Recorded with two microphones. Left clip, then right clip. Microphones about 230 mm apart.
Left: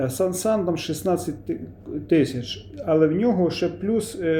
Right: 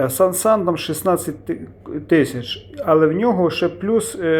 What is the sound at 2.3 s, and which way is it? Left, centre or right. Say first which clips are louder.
Speech: right 5 dB; centre.